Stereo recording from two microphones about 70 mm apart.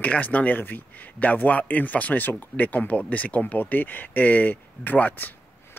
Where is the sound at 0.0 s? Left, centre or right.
Left.